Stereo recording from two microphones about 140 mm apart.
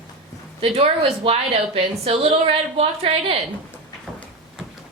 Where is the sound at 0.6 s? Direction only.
40° right (ahead or behind).